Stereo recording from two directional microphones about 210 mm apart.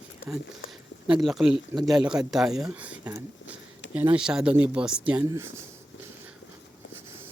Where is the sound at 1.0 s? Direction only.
5° right (ahead or behind).